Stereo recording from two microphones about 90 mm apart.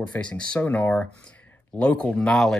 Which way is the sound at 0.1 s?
10° left (ahead or behind).